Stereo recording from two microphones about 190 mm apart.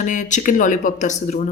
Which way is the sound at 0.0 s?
40° left (ahead or behind).